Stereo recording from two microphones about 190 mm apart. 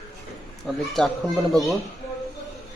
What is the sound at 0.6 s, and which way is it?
A man's voice, centre (ahead or behind).